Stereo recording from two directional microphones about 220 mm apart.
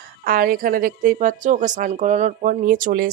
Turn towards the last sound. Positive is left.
turn(degrees=-40)  # may be behind; listen again after turning